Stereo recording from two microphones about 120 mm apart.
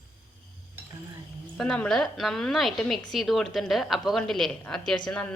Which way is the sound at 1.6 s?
5° left (ahead or behind).